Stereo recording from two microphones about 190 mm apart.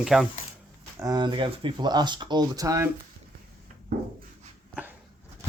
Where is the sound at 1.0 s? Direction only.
20° right (ahead or behind).